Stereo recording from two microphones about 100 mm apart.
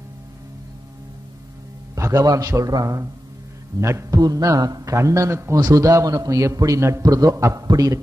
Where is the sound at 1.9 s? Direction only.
35° right (ahead or behind).